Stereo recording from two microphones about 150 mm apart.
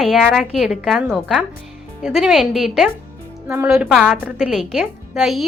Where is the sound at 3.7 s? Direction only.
5° right (ahead or behind).